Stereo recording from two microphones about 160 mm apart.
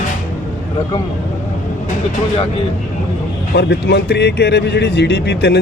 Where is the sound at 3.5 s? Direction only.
90° left.